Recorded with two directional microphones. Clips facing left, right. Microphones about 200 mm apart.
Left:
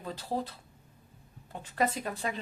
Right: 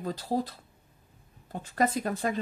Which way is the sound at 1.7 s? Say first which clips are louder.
Right 3 dB; 45° right (ahead or behind).